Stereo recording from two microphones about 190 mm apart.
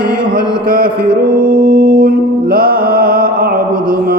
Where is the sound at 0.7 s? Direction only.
50° right (ahead or behind).